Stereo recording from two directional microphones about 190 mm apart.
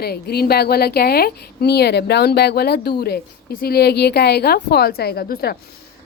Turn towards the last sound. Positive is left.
turn(degrees=50)  # may be behind; listen again after turning